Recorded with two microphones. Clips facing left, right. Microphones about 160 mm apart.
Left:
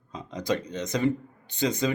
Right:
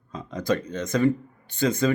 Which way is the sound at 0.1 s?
20° left (ahead or behind).